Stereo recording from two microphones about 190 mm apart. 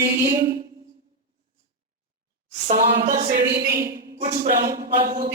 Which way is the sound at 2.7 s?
50° right (ahead or behind).